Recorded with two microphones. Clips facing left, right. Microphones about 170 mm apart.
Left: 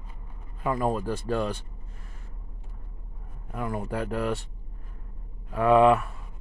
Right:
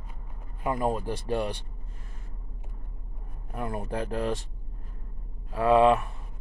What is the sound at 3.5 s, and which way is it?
Speech, 30° right (ahead or behind).